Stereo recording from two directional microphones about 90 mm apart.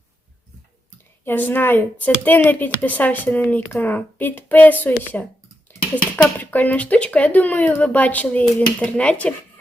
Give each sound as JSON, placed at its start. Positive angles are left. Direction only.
{"t": 1.2, "sound": "speech", "side_deg": 20}
{"t": 6.4, "sound": "speech", "side_deg": 20}